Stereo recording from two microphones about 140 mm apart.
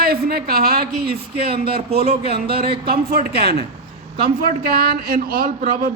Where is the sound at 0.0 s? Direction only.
90° right.